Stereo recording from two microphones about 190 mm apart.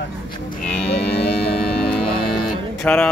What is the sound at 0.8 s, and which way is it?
Music, 30° left (ahead or behind).